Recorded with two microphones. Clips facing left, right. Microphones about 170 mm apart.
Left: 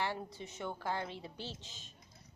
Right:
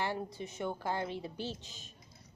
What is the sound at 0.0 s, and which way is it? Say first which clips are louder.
A woman's voice: right 2 dB; 15° right (ahead or behind).